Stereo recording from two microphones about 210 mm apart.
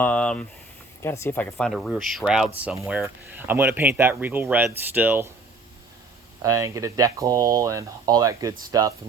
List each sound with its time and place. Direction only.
0.0 s a sound: 5° left (ahead or behind)
1.0 s speech: 10° left (ahead or behind); by 5.3 s 10° right (ahead or behind)
6.4 s speech: 15° right (ahead or behind)